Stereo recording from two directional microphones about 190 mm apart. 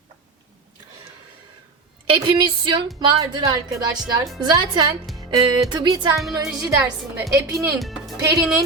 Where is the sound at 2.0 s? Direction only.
25° right (ahead or behind).